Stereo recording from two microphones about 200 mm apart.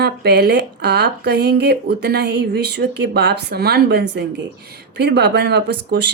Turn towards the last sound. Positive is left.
turn(degrees=-60)  # may be behind; listen again after turning